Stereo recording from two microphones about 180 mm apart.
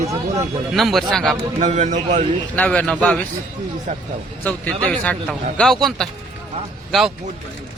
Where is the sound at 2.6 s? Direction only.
5° left (ahead or behind).